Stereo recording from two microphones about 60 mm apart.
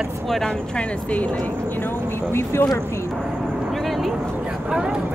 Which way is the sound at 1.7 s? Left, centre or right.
Left.